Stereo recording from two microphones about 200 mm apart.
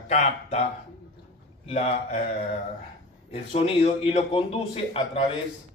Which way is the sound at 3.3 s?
30° left (ahead or behind).